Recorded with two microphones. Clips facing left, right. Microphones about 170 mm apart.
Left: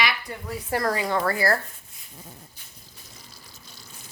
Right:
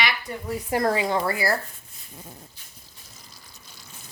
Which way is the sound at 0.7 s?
20° right (ahead or behind).